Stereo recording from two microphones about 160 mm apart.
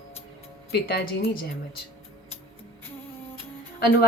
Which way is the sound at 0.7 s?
80° left.